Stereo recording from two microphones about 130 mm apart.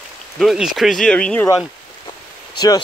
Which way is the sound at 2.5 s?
30° left (ahead or behind).